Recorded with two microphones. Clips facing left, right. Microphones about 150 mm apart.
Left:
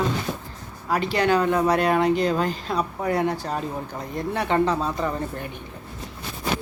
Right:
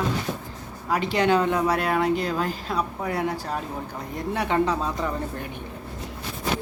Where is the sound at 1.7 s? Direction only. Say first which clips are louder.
Left 3 dB; 5° right (ahead or behind).